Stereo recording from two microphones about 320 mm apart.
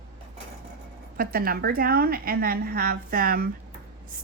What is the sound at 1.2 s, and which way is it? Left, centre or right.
Speech, right.